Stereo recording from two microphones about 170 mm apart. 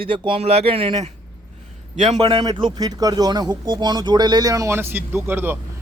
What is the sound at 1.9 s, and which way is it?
Speech, 45° right (ahead or behind).